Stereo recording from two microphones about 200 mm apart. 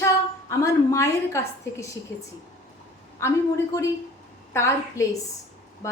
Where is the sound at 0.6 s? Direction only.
15° left (ahead or behind).